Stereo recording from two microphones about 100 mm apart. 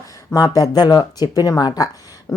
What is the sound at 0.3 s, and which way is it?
A woman's voice, 35° left (ahead or behind).